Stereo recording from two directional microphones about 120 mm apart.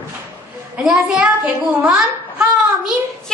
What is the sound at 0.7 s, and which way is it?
A child's voice, centre (ahead or behind).